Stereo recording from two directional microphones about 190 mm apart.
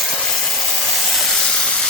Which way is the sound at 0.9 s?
Centre (ahead or behind).